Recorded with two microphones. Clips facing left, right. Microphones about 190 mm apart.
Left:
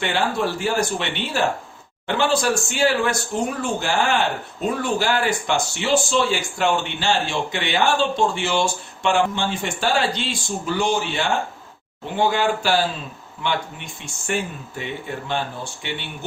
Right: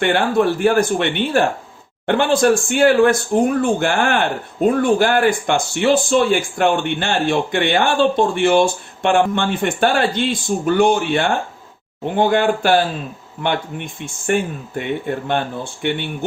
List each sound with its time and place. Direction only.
0.0 s speech: 55° right (ahead or behind)